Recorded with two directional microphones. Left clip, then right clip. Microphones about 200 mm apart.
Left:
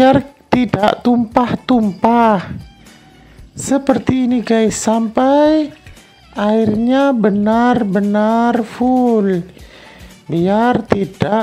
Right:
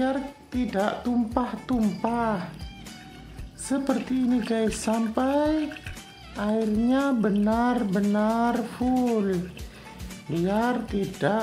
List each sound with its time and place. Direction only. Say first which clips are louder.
0.0 s speech: left 16 dB; 40° left (ahead or behind)
3.6 s speech: left 12 dB; 35° left (ahead or behind)